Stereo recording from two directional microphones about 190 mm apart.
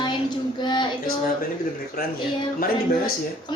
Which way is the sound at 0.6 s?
25° left (ahead or behind).